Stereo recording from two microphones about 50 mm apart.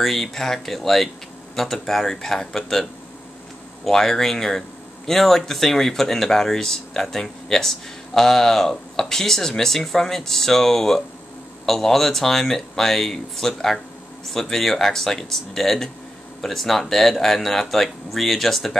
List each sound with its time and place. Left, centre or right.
0.0 s speech: centre